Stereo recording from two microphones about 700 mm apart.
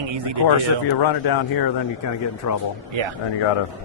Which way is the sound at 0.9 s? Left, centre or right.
Left.